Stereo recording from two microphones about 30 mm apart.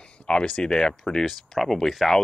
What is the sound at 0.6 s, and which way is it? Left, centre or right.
Speech, left.